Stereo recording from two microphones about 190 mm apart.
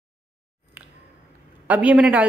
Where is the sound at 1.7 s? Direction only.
5° right (ahead or behind).